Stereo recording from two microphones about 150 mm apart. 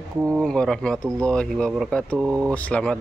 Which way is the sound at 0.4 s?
5° left (ahead or behind).